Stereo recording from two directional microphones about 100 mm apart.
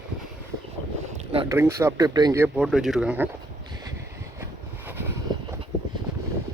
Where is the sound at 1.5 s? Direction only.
25° right (ahead or behind).